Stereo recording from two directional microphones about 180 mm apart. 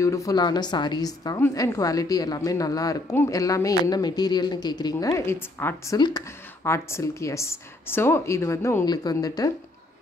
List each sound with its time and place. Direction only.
0.0 s a woman's voice: 15° left (ahead or behind)